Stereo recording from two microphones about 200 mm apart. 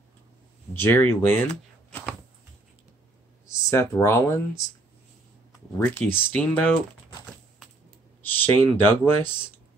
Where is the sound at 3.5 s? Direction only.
15° left (ahead or behind).